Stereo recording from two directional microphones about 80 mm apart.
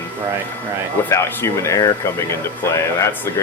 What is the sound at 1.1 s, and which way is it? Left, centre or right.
Speech, left.